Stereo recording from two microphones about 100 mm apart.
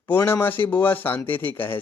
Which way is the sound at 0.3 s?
20° left (ahead or behind).